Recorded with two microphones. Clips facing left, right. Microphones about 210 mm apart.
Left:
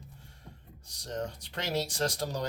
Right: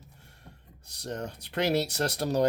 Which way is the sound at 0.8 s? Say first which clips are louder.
Right 1 dB; 65° right (ahead or behind).